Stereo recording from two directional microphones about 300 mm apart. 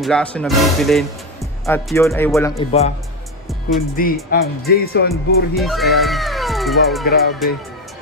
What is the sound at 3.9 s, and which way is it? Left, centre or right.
Speech, left.